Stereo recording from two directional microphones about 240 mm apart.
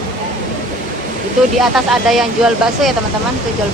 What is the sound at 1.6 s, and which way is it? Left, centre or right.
Speech, centre.